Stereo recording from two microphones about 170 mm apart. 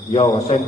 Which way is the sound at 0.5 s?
40° left (ahead or behind).